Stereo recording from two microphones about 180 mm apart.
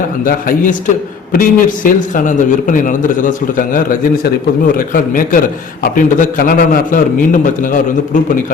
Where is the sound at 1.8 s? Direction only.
45° left (ahead or behind).